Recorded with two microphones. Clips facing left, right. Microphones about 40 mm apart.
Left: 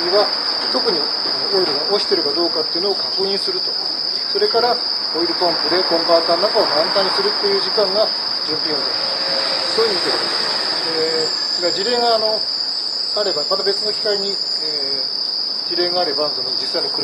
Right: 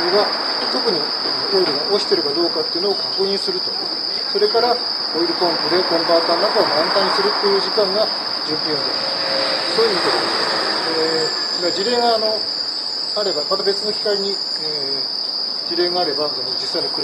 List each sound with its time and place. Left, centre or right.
0.7 s speech: centre
7.2 s speech: centre
7.5 s speech: centre
9.3 s a sound: centre
11.6 s speech: centre
15.8 s speech: centre